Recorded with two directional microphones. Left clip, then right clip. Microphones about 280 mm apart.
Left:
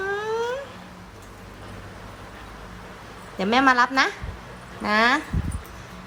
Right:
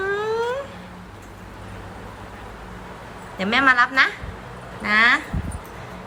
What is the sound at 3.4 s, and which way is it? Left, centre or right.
A woman's voice, centre.